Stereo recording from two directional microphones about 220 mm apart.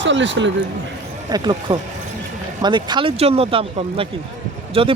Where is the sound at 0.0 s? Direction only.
55° right (ahead or behind).